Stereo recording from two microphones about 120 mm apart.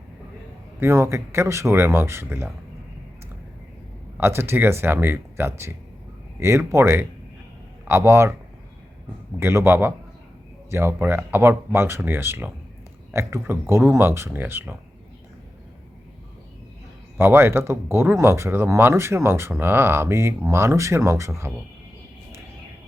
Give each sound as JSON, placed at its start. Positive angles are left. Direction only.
{"t": 0.8, "sound": "speech", "side_deg": -20}
{"t": 4.2, "sound": "speech", "side_deg": -20}
{"t": 9.4, "sound": "speech", "side_deg": -20}
{"t": 17.2, "sound": "speech", "side_deg": -20}